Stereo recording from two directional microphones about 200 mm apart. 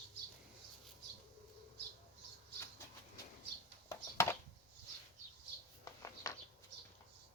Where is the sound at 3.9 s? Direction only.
15° left (ahead or behind).